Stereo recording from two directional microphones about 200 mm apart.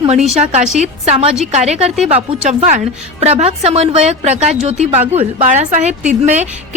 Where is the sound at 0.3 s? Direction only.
35° right (ahead or behind).